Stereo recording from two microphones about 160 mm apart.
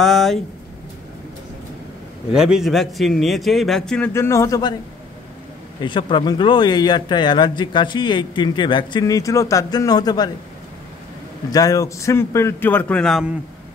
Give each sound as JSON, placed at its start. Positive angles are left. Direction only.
{"t": 0.0, "sound": "speech", "side_deg": 0}
{"t": 2.3, "sound": "a man's voice", "side_deg": -5}
{"t": 4.1, "sound": "speech", "side_deg": 15}
{"t": 5.8, "sound": "speech", "side_deg": 30}
{"t": 11.5, "sound": "a man's voice", "side_deg": 20}